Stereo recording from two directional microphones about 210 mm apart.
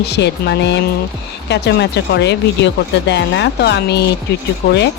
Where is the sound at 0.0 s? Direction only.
50° left (ahead or behind).